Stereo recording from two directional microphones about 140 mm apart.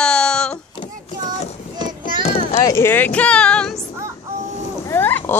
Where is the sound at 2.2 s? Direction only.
55° left (ahead or behind).